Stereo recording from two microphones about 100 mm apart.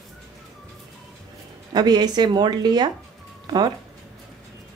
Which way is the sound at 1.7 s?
45° right (ahead or behind).